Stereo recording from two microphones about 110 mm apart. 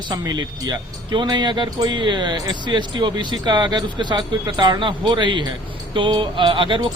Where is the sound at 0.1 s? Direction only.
40° right (ahead or behind).